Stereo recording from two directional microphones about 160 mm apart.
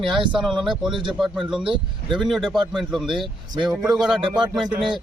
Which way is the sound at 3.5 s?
25° right (ahead or behind).